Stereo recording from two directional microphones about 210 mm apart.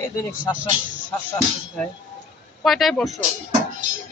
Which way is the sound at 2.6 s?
Centre (ahead or behind).